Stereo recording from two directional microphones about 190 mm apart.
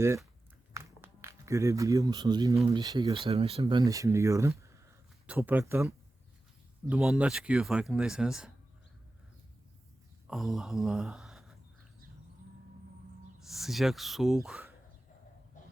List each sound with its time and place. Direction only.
0.7 s a sound: 15° right (ahead or behind)
2.6 s speech: 20° right (ahead or behind)
3.8 s speech: 15° right (ahead or behind)
6.9 s speech: 5° right (ahead or behind)
10.2 s speech: centre (ahead or behind)
13.5 s speech: centre (ahead or behind)
15.6 s a sound: 40° left (ahead or behind)